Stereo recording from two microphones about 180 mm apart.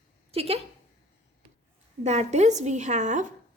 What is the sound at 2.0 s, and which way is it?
A woman's voice, 40° right (ahead or behind).